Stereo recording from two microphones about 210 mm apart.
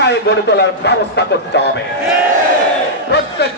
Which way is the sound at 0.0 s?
55° left (ahead or behind).